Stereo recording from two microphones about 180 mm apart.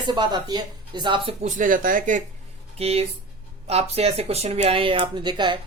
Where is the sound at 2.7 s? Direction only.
35° right (ahead or behind).